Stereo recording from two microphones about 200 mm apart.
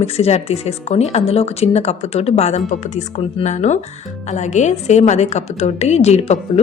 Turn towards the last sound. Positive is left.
turn(degrees=35)  # may be behind; listen again after turning